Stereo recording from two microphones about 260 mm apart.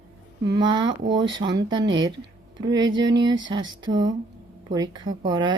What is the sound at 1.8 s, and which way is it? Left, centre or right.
Speech, right.